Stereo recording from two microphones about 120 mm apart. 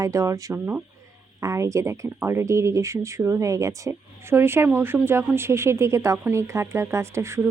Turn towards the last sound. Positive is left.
turn(degrees=-25)  # may be behind; listen again after turning